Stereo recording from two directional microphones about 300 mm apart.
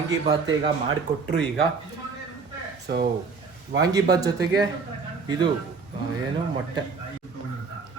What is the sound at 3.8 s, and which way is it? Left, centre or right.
Speech, centre.